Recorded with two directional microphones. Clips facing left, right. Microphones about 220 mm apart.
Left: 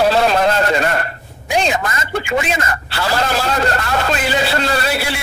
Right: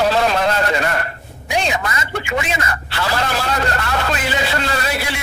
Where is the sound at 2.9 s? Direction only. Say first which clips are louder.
Left 3 dB; 35° left (ahead or behind).